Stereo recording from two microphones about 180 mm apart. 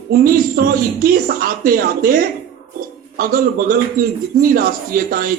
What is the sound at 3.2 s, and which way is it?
A man's voice, 50° right (ahead or behind).